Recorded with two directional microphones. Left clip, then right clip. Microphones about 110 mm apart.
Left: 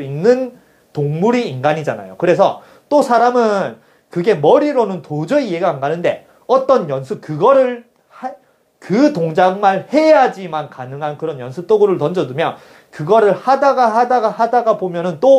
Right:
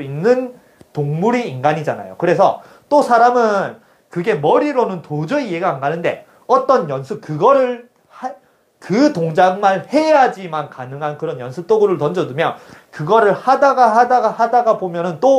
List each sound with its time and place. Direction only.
0.0 s speech: 30° right (ahead or behind)
2.9 s speech: 10° right (ahead or behind)
4.6 s speech: 30° right (ahead or behind)
5.2 s speech: 15° right (ahead or behind)
8.2 s a sound: 30° right (ahead or behind)
8.8 s speech: 25° right (ahead or behind)
14.1 s speech: 5° right (ahead or behind)